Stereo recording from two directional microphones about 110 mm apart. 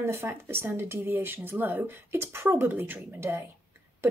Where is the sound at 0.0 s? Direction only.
20° right (ahead or behind).